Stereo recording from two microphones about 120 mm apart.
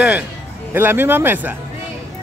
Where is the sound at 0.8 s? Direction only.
15° right (ahead or behind).